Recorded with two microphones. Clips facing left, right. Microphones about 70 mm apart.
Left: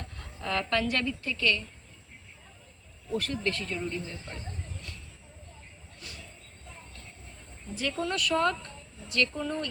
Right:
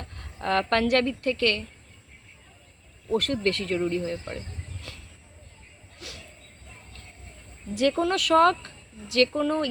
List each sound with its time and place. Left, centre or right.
0.0 s speech: right
3.1 s speech: right
6.0 s a sound: right
7.7 s speech: right